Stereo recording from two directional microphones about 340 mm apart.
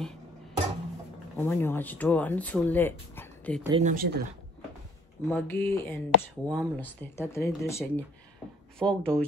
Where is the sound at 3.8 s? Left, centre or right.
Right.